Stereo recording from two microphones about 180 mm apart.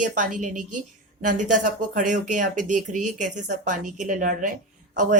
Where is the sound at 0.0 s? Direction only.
45° right (ahead or behind).